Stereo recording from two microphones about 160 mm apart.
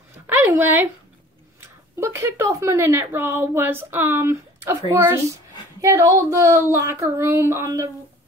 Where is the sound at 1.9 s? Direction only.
15° right (ahead or behind).